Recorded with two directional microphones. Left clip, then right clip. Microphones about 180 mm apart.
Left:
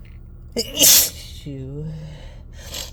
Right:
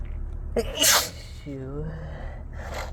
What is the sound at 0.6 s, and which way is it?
Speech, 50° left (ahead or behind).